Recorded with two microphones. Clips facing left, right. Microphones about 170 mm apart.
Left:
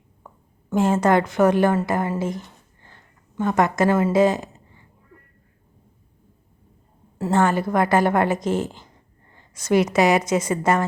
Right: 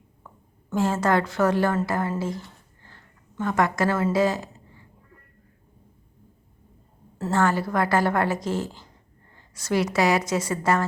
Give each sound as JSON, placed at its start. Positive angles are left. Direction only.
{"t": 0.7, "sound": "a woman's voice", "side_deg": 20}
{"t": 7.2, "sound": "a woman's voice", "side_deg": 20}